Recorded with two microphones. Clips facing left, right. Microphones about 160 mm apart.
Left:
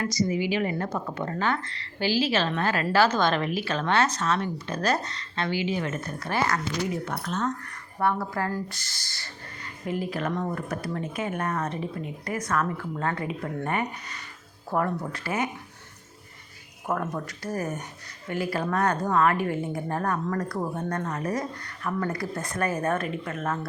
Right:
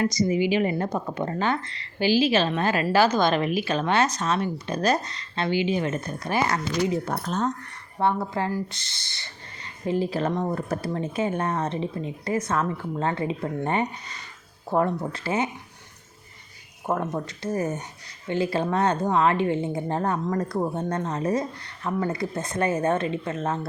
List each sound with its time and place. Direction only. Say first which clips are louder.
0.0 s speech: right 4 dB; 20° right (ahead or behind)
7.0 s speech: right 3 dB; 40° right (ahead or behind)
7.9 s speech: right 2 dB; 25° right (ahead or behind)
14.7 s speech: right 3 dB; 25° right (ahead or behind)
16.8 s speech: right 3 dB; 25° right (ahead or behind)